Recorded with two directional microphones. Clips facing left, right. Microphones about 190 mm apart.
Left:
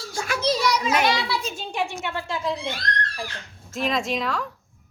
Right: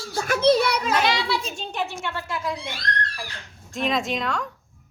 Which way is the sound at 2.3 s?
25° left (ahead or behind).